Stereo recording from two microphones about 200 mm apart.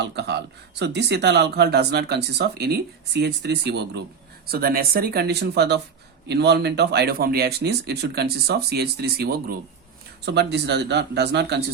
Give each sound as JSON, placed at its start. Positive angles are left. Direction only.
{"t": 0.0, "sound": "speech", "side_deg": -55}